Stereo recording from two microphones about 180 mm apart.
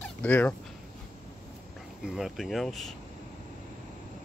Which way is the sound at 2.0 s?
Centre (ahead or behind).